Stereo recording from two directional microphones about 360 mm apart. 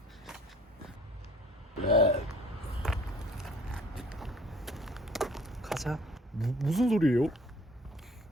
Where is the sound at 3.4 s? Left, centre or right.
Centre.